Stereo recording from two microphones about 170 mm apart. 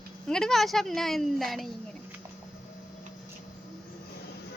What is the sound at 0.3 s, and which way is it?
A woman's voice, 5° left (ahead or behind).